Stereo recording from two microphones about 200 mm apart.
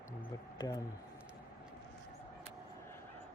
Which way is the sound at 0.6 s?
20° left (ahead or behind).